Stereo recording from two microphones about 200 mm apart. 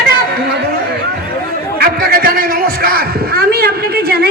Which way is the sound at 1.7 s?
45° right (ahead or behind).